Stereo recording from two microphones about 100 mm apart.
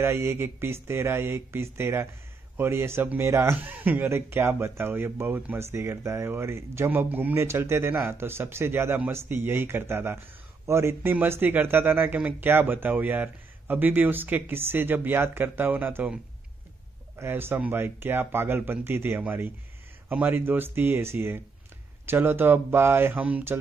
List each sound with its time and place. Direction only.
0.0 s speech: 25° right (ahead or behind)
17.2 s speech: 25° right (ahead or behind)